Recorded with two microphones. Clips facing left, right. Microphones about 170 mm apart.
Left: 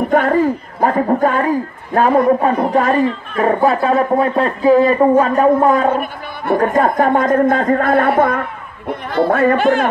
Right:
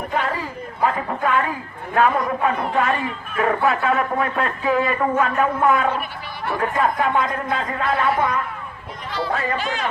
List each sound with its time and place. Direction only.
0.1 s a man's voice: 50° left (ahead or behind)